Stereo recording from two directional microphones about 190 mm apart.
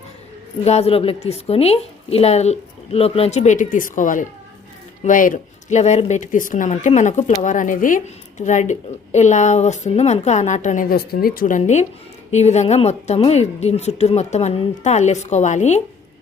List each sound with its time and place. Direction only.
0.6 s a woman's voice: 35° left (ahead or behind)